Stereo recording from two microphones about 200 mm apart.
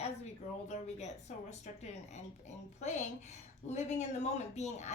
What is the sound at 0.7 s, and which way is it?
A woman's voice, 35° left (ahead or behind).